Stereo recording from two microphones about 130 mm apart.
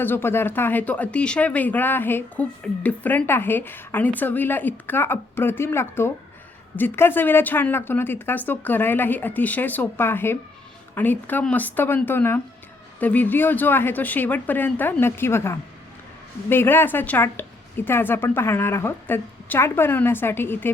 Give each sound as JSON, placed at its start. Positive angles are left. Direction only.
{"t": 0.0, "sound": "speech", "side_deg": 15}